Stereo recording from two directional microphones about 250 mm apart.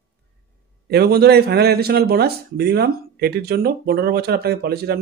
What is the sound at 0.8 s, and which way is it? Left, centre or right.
Speech, right.